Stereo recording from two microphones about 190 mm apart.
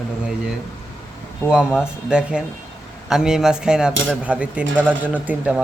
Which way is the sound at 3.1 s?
Centre (ahead or behind).